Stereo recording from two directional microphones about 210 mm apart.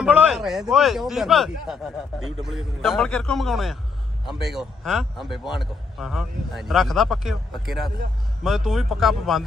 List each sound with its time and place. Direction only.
0.0 s speech: 5° right (ahead or behind)
7.9 s a man's voice: 45° right (ahead or behind)
8.4 s speech: centre (ahead or behind)